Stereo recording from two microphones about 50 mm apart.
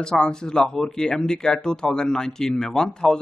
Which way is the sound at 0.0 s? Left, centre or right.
Centre.